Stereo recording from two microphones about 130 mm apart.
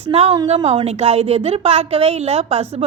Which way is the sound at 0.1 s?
55° right (ahead or behind).